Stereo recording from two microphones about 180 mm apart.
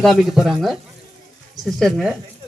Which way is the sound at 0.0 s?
Centre (ahead or behind).